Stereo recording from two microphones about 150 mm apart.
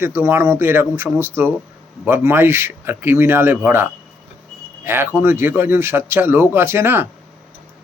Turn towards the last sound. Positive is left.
turn(degrees=-15)  # may be behind; listen again after turning